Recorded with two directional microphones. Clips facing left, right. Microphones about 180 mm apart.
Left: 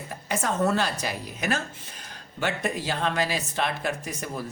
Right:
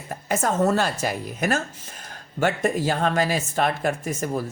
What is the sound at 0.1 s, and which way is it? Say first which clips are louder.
Speech: right 5 dB; 45° right (ahead or behind).